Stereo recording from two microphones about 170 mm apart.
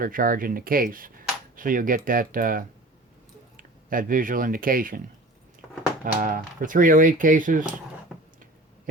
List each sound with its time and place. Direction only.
0.0 s speech: 55° right (ahead or behind)
6.1 s speech: 55° right (ahead or behind)